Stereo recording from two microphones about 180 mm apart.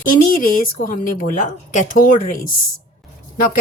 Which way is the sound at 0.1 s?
50° left (ahead or behind).